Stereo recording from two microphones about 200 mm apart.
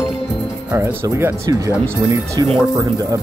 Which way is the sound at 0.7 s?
10° right (ahead or behind).